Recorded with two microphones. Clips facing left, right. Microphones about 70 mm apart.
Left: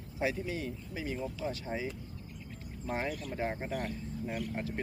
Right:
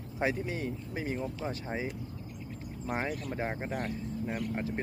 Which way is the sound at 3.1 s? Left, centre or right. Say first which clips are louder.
Right 2 dB; right.